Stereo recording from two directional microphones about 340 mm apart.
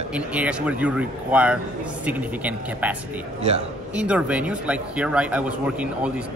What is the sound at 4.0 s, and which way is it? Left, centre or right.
Speech, centre.